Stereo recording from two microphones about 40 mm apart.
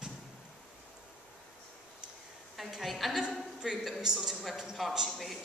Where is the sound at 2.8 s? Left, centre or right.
Centre.